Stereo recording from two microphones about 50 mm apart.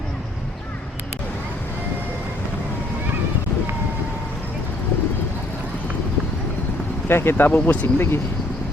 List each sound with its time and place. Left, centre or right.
7.1 s speech: left
7.6 s speech: left
7.9 s speech: left